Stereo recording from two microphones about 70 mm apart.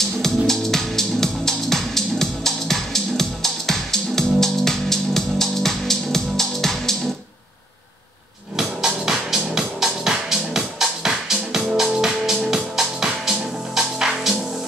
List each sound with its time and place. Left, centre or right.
0.2 s music: centre
8.5 s music: centre